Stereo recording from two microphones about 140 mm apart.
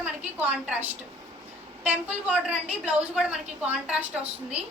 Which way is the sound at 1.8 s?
10° right (ahead or behind).